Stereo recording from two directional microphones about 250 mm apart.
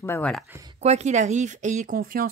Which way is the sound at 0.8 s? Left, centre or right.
Right.